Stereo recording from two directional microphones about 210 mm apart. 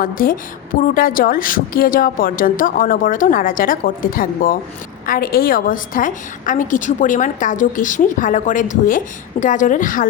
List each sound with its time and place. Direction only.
0.0 s a woman's voice: 40° left (ahead or behind)